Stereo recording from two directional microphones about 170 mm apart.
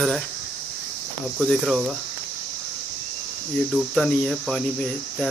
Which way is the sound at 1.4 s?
Centre (ahead or behind).